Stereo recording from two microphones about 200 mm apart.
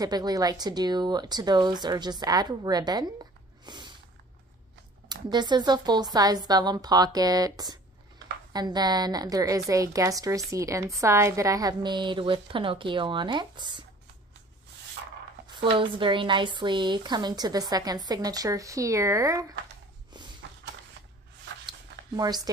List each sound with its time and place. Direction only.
0.0 s a woman's voice: 20° right (ahead or behind)
3.6 s snort: 20° right (ahead or behind)
5.0 s a woman's voice: 20° right (ahead or behind)
15.6 s a woman's voice: 25° right (ahead or behind)
20.1 s a sound: 20° right (ahead or behind)
21.6 s a sound: 20° right (ahead or behind)